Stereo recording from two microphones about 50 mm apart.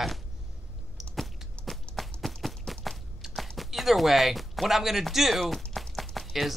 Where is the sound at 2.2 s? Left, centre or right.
Centre.